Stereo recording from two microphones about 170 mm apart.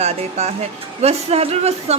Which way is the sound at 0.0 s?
40° right (ahead or behind).